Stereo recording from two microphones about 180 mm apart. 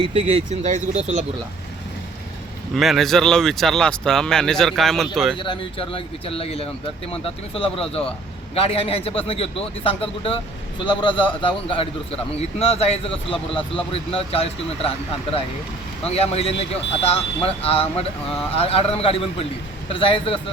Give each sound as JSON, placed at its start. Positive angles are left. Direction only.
{"t": 0.0, "sound": "speech", "side_deg": -35}
{"t": 2.7, "sound": "speech", "side_deg": 0}
{"t": 5.4, "sound": "a man's voice", "side_deg": 30}